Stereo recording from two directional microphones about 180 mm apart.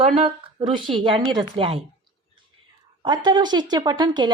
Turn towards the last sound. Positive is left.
turn(degrees=-25)  # may be behind; listen again after turning